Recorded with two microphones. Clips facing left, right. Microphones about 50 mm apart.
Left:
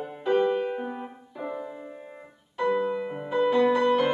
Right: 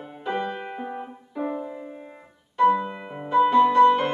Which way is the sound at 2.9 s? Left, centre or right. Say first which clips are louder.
Left 5 dB; right.